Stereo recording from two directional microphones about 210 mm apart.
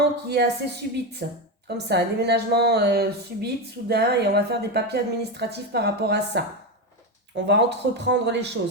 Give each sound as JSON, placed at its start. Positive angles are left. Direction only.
{"t": 0.0, "sound": "a woman's voice", "side_deg": -50}